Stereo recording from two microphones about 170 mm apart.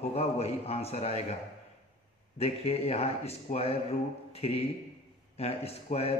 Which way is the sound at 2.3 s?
35° left (ahead or behind).